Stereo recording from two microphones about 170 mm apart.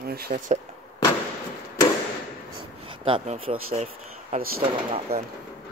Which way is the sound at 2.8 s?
30° right (ahead or behind).